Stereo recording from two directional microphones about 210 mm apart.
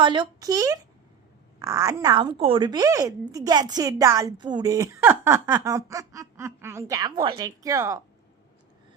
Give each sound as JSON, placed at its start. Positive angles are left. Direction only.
{"t": 0.0, "sound": "a woman's voice", "side_deg": -20}